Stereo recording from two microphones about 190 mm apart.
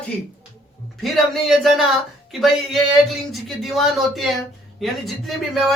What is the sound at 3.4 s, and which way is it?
Speech, centre (ahead or behind).